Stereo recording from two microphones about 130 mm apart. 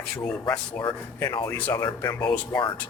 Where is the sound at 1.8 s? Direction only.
30° left (ahead or behind).